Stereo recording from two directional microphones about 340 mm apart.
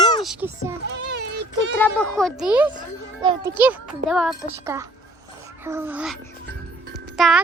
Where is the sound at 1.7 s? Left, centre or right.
Centre.